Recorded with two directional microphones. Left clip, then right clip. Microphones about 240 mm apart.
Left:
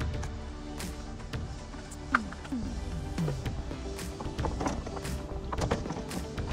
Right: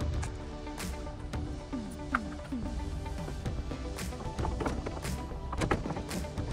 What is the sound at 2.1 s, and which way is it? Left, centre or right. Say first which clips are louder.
Music: left 5 dB; left.